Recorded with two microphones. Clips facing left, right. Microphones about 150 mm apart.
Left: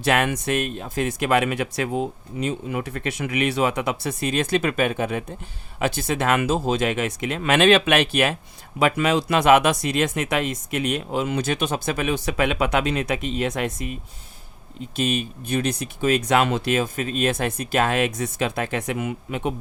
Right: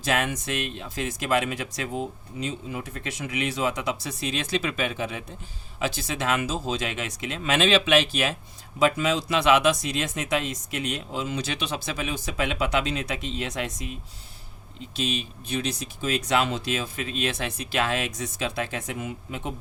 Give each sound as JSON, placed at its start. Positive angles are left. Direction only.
{"t": 0.0, "sound": "speech", "side_deg": 65}